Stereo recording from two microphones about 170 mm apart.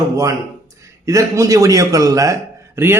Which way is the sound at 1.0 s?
20° right (ahead or behind).